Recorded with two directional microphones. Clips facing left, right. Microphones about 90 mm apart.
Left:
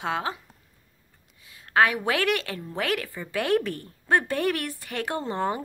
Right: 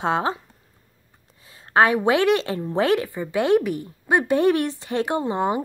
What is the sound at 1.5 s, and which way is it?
Speech, 30° right (ahead or behind).